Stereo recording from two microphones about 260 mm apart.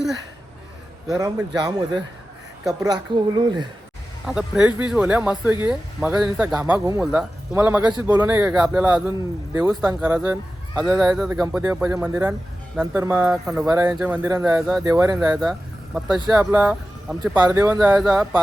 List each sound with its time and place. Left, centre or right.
1.5 s a man's voice: centre
4.3 s a man's voice: centre
15.2 s a man's voice: centre